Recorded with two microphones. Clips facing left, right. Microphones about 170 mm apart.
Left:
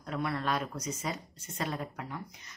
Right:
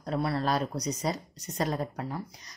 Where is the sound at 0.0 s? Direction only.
35° right (ahead or behind).